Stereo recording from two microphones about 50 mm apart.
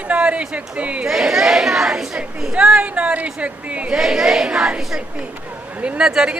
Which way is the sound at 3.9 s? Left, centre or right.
Centre.